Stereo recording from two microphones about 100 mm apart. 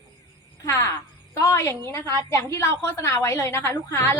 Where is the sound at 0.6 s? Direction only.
30° left (ahead or behind).